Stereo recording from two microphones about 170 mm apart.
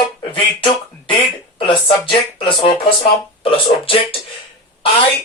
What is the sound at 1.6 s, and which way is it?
Speech, 30° left (ahead or behind).